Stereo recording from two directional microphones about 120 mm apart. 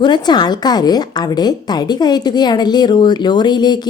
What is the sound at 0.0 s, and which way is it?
A woman's voice, 35° left (ahead or behind).